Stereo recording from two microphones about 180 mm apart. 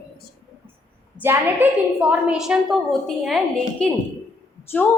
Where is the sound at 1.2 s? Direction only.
10° right (ahead or behind).